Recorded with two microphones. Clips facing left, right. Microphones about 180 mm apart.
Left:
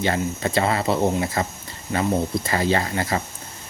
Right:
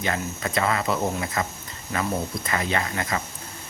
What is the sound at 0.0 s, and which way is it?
Speech, 30° left (ahead or behind).